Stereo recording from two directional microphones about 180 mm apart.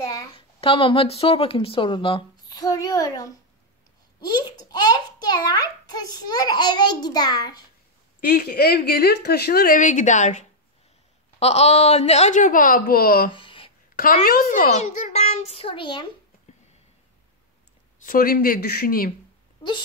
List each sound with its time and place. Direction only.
0.0 s a sound: 20° left (ahead or behind)
0.6 s a child's voice: 30° left (ahead or behind)
8.2 s speech: 55° left (ahead or behind)
13.3 s a sound: 30° left (ahead or behind)
13.9 s speech: 50° left (ahead or behind)
14.8 s a child's voice: 40° left (ahead or behind)
18.0 s speech: 50° left (ahead or behind)